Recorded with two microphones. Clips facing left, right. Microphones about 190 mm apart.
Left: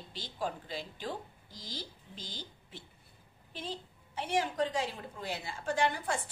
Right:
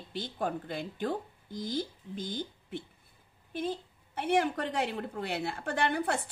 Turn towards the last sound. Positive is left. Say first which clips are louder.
# right 2 dB
turn(degrees=-60)  # may be behind; listen again after turning